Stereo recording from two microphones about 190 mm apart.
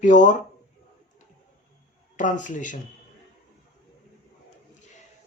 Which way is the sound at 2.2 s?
40° left (ahead or behind).